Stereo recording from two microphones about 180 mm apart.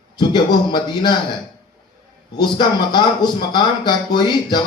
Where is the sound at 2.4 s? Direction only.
25° left (ahead or behind).